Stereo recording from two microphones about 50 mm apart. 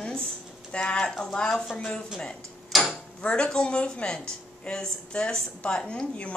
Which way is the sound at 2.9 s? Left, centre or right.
Left.